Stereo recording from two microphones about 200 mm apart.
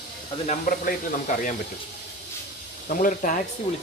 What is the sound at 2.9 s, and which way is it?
Speech, 40° left (ahead or behind).